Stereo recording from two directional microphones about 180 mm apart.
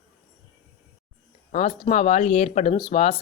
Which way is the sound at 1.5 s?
35° left (ahead or behind).